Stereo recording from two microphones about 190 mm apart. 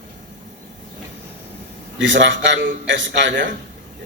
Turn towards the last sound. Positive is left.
turn(degrees=-70)  # may be behind; listen again after turning